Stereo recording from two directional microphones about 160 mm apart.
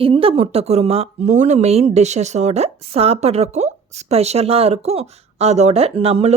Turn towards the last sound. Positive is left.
turn(degrees=-40)  # may be behind; listen again after turning